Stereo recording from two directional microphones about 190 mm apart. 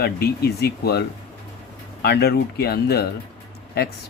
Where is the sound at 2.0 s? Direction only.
55° left (ahead or behind).